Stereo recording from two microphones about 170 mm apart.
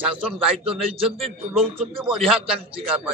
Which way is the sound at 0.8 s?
35° right (ahead or behind).